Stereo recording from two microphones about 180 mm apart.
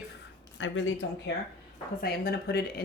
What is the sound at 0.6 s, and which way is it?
Speech, 90° left.